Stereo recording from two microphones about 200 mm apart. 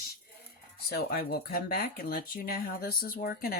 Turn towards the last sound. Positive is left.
turn(degrees=50)  # may be behind; listen again after turning